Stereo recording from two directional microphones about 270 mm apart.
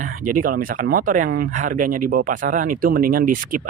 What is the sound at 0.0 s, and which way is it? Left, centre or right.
Speech, right.